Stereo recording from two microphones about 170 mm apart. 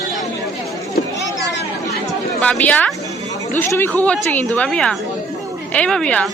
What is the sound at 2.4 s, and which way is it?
A woman's voice, 10° left (ahead or behind).